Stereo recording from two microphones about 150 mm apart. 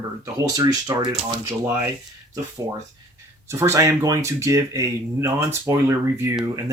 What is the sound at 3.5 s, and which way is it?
Speech, 20° right (ahead or behind).